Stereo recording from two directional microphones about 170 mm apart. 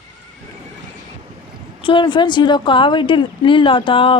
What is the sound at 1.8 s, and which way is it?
Speech, 30° left (ahead or behind).